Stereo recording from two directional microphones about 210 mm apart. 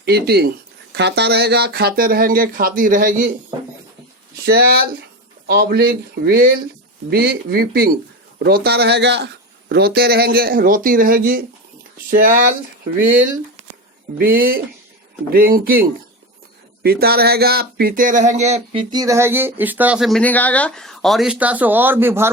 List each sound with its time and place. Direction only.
0.0 s a man's voice: 50° right (ahead or behind)
4.4 s a man's voice: 45° right (ahead or behind); by 22.3 s 10° right (ahead or behind)